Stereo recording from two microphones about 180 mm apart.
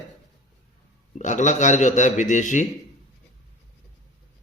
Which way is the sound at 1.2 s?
40° left (ahead or behind).